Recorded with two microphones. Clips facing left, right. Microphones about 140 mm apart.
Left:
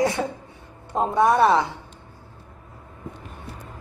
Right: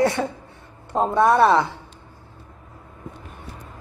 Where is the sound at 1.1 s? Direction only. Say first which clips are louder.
Right 1 dB; 15° left (ahead or behind).